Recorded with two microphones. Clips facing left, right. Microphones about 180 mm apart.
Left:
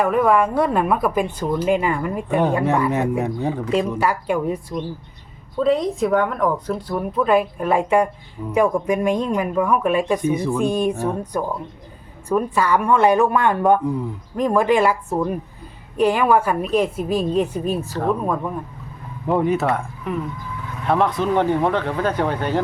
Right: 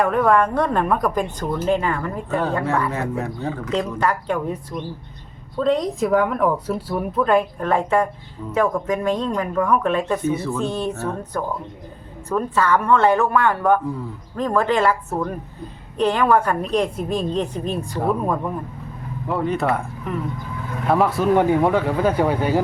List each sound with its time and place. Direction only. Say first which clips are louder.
0.0 s speech: even; 5° left (ahead or behind)
17.9 s speech: right 2 dB; 5° right (ahead or behind)
19.3 s speech: left 4 dB; 15° left (ahead or behind)
19.5 s speech: even; centre (ahead or behind)